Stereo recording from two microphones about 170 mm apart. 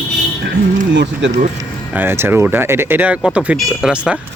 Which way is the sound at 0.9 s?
90° right.